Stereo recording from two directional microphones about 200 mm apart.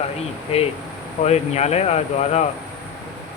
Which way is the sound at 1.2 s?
35° left (ahead or behind).